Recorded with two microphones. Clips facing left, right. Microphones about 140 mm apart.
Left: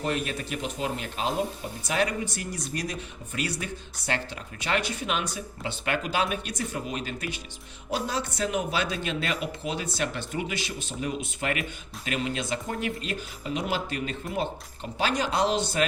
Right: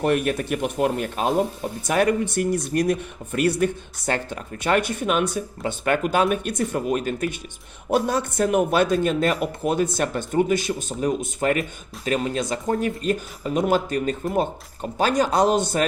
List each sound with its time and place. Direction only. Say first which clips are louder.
0.0 s speech: right 8 dB; 60° right (ahead or behind)